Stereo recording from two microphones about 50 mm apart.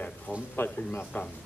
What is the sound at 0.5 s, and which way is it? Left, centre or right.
Speech, left.